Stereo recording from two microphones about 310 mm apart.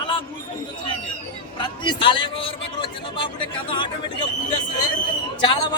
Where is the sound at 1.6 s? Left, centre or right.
Centre.